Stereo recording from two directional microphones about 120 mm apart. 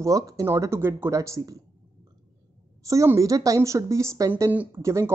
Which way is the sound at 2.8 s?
25° right (ahead or behind).